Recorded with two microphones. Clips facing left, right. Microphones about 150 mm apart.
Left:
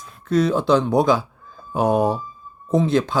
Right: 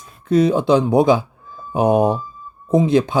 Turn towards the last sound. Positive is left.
turn(degrees=-15)  # may be behind; listen again after turning